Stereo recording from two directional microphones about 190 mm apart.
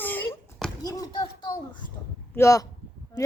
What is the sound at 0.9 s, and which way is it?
A woman's voice, 20° left (ahead or behind).